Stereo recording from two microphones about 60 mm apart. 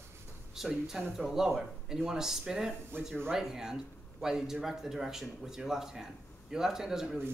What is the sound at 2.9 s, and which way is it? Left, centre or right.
Speech, right.